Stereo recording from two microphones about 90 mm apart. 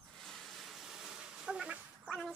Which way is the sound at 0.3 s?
Centre (ahead or behind).